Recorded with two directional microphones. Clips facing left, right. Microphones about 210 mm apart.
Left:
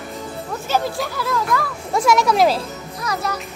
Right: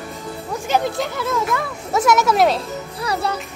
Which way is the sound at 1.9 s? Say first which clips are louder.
Right 1 dB; 5° right (ahead or behind).